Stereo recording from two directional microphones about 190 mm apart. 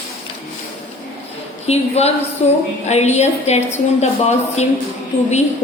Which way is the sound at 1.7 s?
35° left (ahead or behind).